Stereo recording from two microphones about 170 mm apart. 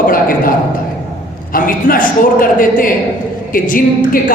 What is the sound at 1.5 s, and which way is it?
A man's voice, 55° left (ahead or behind).